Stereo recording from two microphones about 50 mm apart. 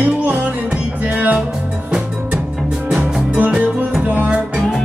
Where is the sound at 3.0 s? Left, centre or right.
Right.